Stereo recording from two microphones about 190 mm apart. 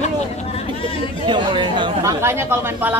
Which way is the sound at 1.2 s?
25° right (ahead or behind).